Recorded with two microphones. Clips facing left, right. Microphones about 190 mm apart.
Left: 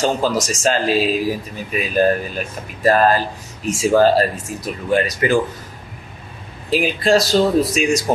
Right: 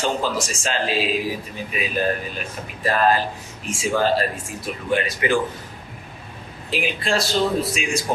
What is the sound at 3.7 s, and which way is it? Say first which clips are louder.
A man's voice: left 7 dB; 40° left (ahead or behind).